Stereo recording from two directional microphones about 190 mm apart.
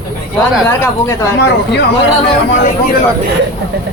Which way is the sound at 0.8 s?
15° left (ahead or behind).